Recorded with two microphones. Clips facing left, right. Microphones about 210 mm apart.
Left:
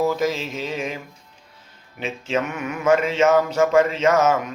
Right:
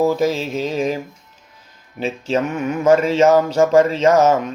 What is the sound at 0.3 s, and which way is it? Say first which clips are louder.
Mantra: right 5 dB; 35° right (ahead or behind).